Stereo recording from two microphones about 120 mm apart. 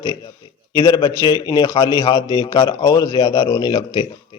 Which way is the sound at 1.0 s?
40° left (ahead or behind).